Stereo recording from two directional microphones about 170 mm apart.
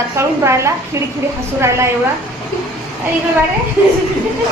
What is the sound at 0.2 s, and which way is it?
Speech, 15° right (ahead or behind).